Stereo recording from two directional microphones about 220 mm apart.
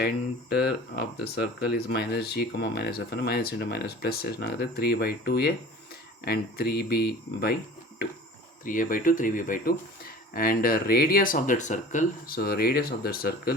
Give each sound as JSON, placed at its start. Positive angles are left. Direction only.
{"t": 1.2, "sound": "speech", "side_deg": 45}
{"t": 8.6, "sound": "speech", "side_deg": 40}